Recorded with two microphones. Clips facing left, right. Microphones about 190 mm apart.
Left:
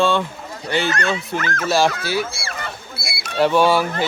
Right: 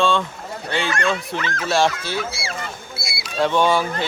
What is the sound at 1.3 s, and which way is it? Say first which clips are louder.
Speech: left 2 dB; 45° left (ahead or behind).